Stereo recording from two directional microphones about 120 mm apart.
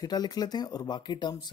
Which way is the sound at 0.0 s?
35° left (ahead or behind).